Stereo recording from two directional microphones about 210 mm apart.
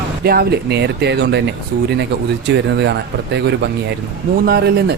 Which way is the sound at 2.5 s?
55° right (ahead or behind).